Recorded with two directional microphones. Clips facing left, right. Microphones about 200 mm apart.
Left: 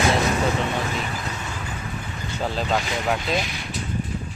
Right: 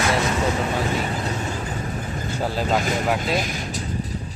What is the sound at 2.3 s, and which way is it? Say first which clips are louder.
Speech: right 1 dB; 10° right (ahead or behind).